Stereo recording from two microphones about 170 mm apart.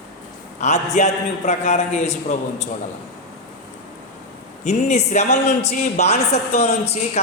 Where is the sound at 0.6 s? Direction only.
45° left (ahead or behind).